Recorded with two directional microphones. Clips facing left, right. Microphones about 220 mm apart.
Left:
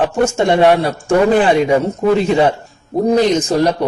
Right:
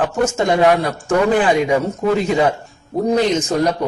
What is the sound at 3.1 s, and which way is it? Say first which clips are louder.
Speech: left 3 dB; 35° left (ahead or behind).